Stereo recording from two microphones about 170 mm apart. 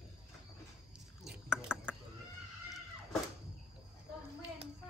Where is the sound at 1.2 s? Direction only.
5° right (ahead or behind).